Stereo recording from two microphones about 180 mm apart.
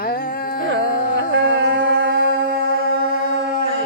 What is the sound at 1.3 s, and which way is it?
Music, 90° right.